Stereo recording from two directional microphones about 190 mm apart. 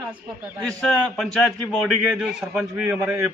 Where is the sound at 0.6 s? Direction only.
5° left (ahead or behind).